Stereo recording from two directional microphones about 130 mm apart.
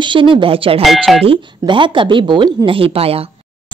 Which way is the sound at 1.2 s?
40° right (ahead or behind).